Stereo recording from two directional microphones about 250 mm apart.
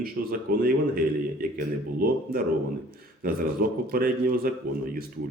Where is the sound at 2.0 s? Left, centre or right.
Right.